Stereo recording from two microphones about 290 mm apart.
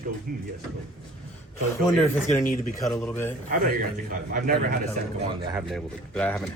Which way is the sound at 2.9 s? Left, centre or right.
Centre.